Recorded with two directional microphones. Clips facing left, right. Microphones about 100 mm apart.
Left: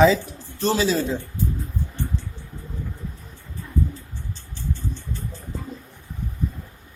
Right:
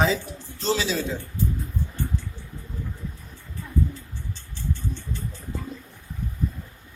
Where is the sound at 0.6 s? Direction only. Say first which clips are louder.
Left 4 dB; 50° left (ahead or behind).